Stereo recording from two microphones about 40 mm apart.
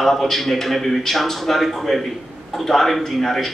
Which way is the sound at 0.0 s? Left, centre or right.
Centre.